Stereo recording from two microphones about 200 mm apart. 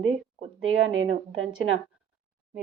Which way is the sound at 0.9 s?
80° right.